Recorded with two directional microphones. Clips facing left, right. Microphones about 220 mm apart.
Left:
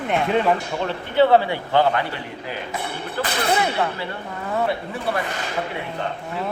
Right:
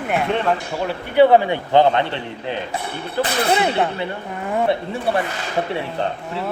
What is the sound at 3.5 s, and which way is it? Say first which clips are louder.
Speech: right 3 dB; 20° right (ahead or behind).